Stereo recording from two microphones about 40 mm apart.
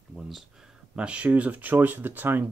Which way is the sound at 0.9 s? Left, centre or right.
Right.